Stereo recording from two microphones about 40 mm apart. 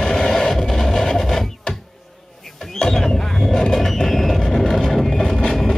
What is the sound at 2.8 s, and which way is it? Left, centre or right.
Music, centre.